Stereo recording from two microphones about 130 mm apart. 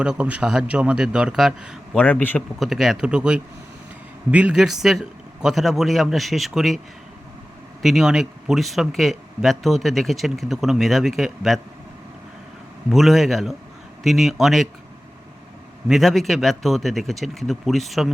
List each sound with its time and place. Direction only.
0.0 s a man's voice: 10° right (ahead or behind)
2.0 s a man's voice: 10° left (ahead or behind)
2.6 s speech: centre (ahead or behind)
7.8 s speech: centre (ahead or behind)
12.9 s speech: centre (ahead or behind)
15.9 s speech: centre (ahead or behind)